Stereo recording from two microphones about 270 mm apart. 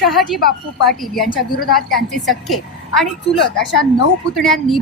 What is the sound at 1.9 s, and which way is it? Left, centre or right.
A woman's voice, centre.